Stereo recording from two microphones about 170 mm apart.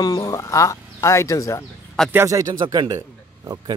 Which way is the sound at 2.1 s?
20° right (ahead or behind).